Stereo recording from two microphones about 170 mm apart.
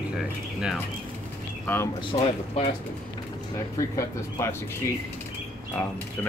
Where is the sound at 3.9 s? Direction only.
20° left (ahead or behind).